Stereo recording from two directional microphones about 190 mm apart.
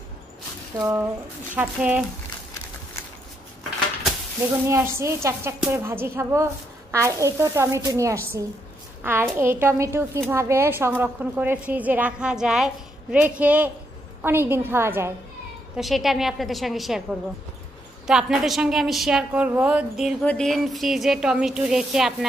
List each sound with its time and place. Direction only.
0.7 s a woman's voice: 15° right (ahead or behind)
4.6 s a woman's voice: 15° right (ahead or behind)
15.7 s a woman's voice: centre (ahead or behind)
18.0 s a woman's voice: centre (ahead or behind)